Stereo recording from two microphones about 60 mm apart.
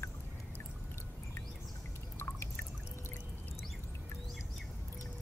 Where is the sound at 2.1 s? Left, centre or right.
Left.